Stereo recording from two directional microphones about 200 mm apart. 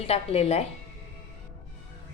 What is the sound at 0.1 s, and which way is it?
Speech, 30° left (ahead or behind).